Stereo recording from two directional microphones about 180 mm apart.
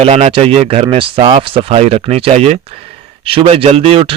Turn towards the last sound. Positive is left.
turn(degrees=-30)  # may be behind; listen again after turning